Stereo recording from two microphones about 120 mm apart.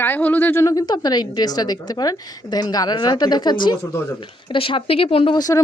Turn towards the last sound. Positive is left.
turn(degrees=30)  # may be behind; listen again after turning